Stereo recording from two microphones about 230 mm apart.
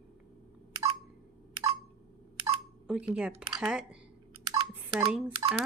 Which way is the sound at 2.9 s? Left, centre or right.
Centre.